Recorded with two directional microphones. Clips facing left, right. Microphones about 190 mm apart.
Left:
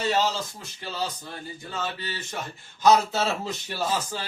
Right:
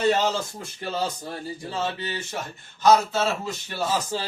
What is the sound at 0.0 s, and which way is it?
Speech, 50° right (ahead or behind).